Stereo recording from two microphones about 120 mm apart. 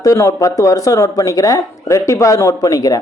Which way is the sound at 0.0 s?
25° left (ahead or behind).